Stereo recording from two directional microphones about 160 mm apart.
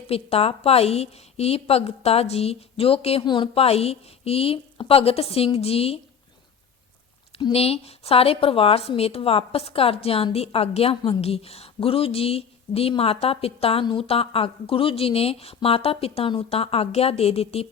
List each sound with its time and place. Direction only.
0.1 s a woman's voice: 40° left (ahead or behind)
7.4 s a woman's voice: 40° left (ahead or behind)